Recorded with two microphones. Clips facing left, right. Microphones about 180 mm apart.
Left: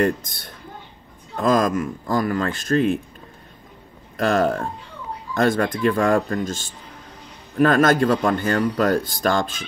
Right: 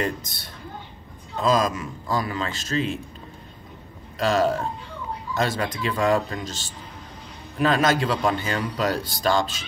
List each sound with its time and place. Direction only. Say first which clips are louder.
1.3 s a man's voice: left 3 dB; 50° left (ahead or behind)
4.2 s a man's voice: left 2 dB; 55° left (ahead or behind)